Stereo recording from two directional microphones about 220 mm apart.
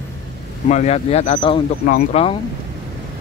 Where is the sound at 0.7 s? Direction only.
30° left (ahead or behind).